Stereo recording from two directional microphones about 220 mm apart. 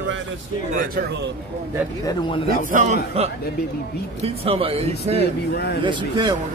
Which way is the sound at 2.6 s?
35° right (ahead or behind).